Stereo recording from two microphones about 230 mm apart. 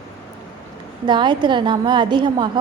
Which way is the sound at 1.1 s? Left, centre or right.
Centre.